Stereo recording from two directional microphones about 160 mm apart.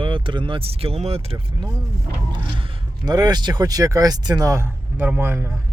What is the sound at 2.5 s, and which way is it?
Speech, 25° right (ahead or behind).